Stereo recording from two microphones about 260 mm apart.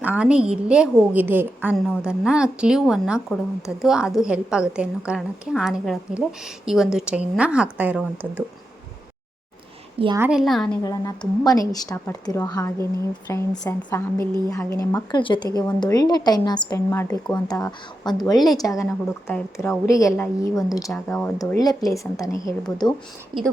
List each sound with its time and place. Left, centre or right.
0.0 s a woman's voice: centre
10.0 s a child's voice: centre
10.2 s a woman's voice: centre
10.8 s a woman's voice: centre
23.3 s a child's voice: centre